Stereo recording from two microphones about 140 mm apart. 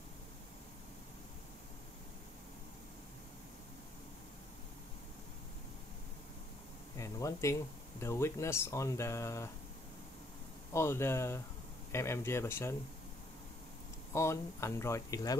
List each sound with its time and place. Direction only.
7.0 s a sound: 20° left (ahead or behind)
8.0 s speech: 20° left (ahead or behind)
10.7 s speech: 20° left (ahead or behind)
14.1 s speech: 20° left (ahead or behind)